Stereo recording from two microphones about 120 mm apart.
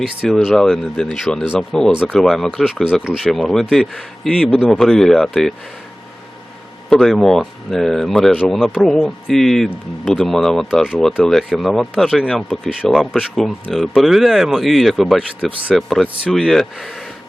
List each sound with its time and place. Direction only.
0.3 s speech: 5° left (ahead or behind)
6.9 s speech: centre (ahead or behind)